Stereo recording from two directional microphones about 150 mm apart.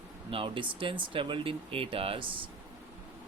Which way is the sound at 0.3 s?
35° right (ahead or behind).